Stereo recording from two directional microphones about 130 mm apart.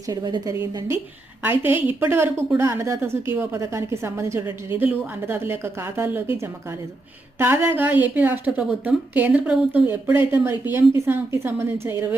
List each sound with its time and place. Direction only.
0.1 s a woman's voice: 30° right (ahead or behind)
1.5 s a woman's voice: 15° right (ahead or behind)
7.3 s speech: 15° right (ahead or behind)